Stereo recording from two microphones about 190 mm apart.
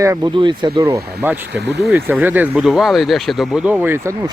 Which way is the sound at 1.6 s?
60° right (ahead or behind).